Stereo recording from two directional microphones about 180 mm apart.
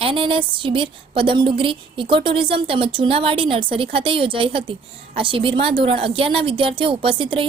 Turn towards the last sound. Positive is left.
turn(degrees=-30)  # may be behind; listen again after turning